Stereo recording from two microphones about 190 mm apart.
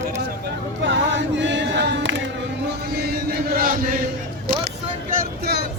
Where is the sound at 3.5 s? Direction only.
45° right (ahead or behind).